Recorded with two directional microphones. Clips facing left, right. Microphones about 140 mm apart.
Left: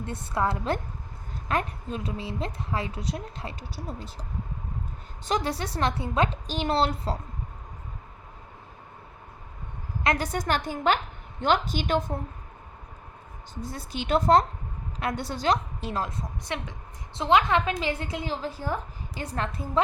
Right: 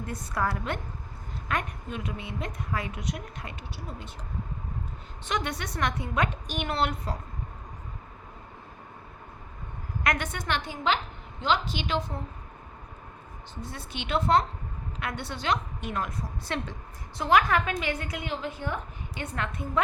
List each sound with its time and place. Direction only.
0.0 s a woman's voice: 25° left (ahead or behind)
10.0 s a woman's voice: 30° left (ahead or behind); by 12.1 s 50° left (ahead or behind)
13.6 s a woman's voice: 40° left (ahead or behind)
16.4 s a woman's voice: 15° left (ahead or behind); by 19.8 s 35° left (ahead or behind)